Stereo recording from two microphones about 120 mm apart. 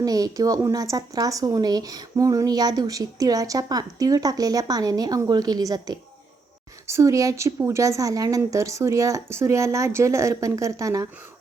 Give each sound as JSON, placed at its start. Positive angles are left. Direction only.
{"t": 0.0, "sound": "speech", "side_deg": -30}